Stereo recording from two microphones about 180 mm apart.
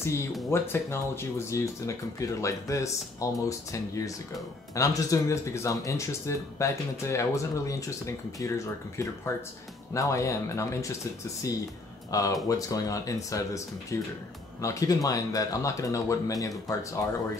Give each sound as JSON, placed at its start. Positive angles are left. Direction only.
{"t": 0.5, "sound": "speech", "side_deg": 15}
{"t": 12.1, "sound": "speech", "side_deg": 20}